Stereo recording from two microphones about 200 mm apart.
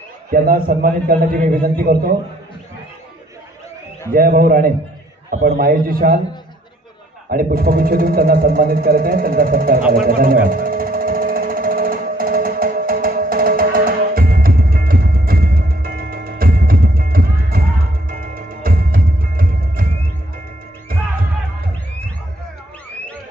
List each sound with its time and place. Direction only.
0.3 s a man's voice: 45° right (ahead or behind)
4.1 s a man's voice: 45° right (ahead or behind)
7.2 s a sound: 45° right (ahead or behind)
18.0 s music: 45° right (ahead or behind)